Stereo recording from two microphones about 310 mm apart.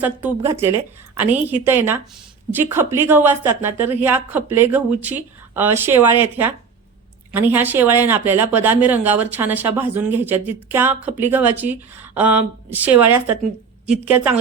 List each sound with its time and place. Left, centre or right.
0.0 s a woman's voice: centre
7.3 s speech: centre